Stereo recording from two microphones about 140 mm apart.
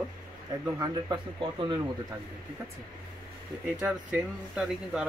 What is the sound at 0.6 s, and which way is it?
Speech, 30° right (ahead or behind).